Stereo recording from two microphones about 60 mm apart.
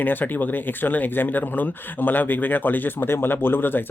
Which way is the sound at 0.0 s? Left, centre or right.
Left.